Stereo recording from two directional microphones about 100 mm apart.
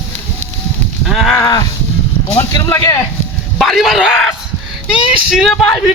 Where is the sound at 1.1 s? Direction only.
Centre (ahead or behind).